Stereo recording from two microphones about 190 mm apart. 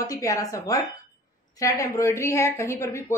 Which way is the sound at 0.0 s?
20° left (ahead or behind).